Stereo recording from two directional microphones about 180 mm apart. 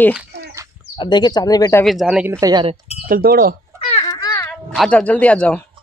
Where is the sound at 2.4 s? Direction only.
25° right (ahead or behind).